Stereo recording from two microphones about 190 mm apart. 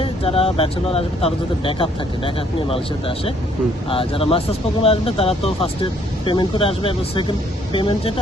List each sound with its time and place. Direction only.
0.0 s speech: 30° left (ahead or behind)